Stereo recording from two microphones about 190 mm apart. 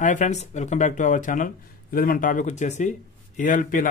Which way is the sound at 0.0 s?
40° left (ahead or behind).